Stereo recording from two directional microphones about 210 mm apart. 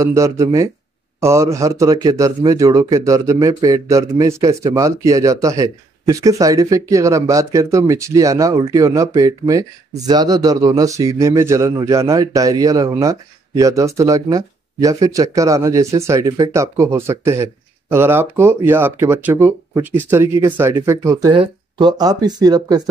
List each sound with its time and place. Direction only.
0.0 s a man's voice: 15° right (ahead or behind)